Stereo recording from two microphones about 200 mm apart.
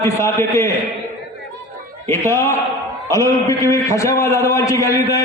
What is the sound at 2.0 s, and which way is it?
A man's voice, 15° left (ahead or behind).